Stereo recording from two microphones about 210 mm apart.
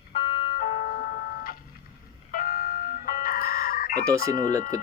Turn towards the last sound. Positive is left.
turn(degrees=-15)  # may be behind; listen again after turning